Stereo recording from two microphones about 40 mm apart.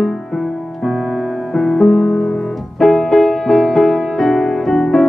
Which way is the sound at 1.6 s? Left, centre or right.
Centre.